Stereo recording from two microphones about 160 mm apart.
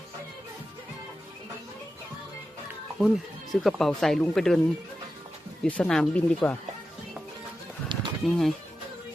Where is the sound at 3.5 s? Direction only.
Centre (ahead or behind).